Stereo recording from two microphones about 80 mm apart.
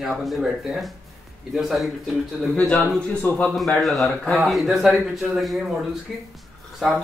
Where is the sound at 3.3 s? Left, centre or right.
Left.